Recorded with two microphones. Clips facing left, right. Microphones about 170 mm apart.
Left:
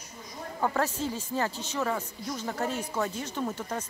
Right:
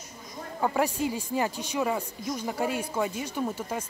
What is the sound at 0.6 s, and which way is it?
A man's voice, 15° right (ahead or behind).